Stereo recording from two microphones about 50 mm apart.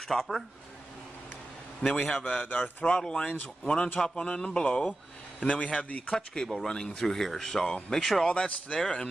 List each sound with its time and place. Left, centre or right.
0.1 s speech: centre
1.8 s speech: centre
2.2 s a man's voice: left
2.8 s speech: centre
6.1 s speech: centre
8.3 s speech: left